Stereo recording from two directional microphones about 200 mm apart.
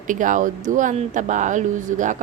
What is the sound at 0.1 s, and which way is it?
Speech, 40° right (ahead or behind).